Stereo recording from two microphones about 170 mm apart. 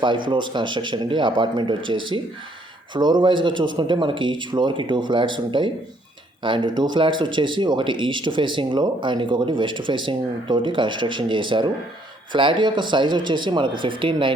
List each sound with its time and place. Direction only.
0.3 s speech: 30° right (ahead or behind)